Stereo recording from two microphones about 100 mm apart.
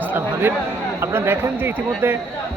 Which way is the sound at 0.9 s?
25° right (ahead or behind).